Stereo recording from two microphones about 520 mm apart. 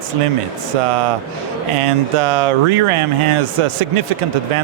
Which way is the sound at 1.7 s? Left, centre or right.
Right.